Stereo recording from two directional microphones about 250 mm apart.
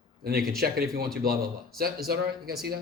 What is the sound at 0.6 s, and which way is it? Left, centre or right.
Speech, right.